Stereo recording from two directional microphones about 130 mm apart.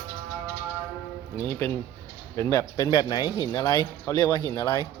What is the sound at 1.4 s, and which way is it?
Speech, 20° left (ahead or behind).